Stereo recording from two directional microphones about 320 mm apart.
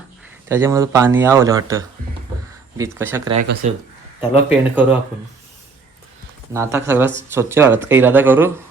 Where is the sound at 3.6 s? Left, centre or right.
Right.